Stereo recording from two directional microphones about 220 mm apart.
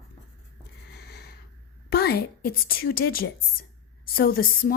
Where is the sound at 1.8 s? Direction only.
45° left (ahead or behind).